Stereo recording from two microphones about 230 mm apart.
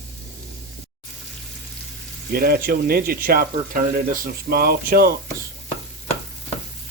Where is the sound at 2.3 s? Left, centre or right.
Right.